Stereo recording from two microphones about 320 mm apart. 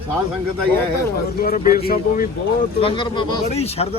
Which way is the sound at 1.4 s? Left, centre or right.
Left.